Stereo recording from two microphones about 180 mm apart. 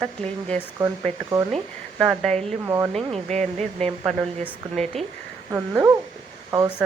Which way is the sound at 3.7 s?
5° left (ahead or behind).